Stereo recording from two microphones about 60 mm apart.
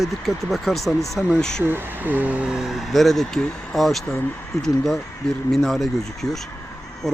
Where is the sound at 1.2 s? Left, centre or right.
Centre.